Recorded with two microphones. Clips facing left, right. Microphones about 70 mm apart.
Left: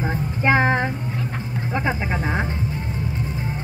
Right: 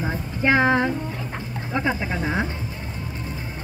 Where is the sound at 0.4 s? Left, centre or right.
Left.